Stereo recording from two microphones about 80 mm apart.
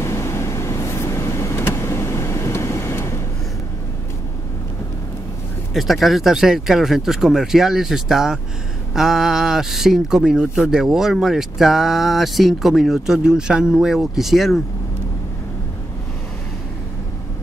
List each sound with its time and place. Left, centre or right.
0.0 s vehicle: left
5.7 s speech: centre